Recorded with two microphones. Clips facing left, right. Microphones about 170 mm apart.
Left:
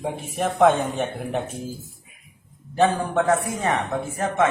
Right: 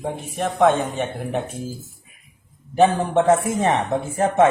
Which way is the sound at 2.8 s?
20° right (ahead or behind).